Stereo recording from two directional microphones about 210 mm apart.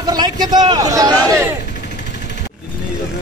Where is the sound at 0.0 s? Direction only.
20° right (ahead or behind).